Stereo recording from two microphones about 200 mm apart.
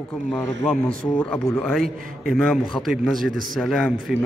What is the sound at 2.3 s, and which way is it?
A man's voice, centre (ahead or behind).